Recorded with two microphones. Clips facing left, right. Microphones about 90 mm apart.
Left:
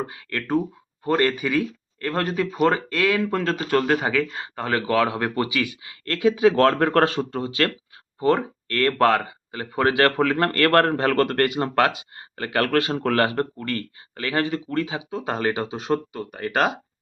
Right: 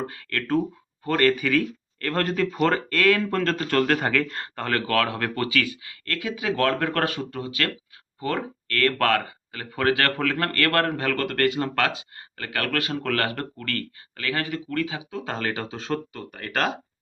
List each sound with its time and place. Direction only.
0.1 s speech: 15° left (ahead or behind)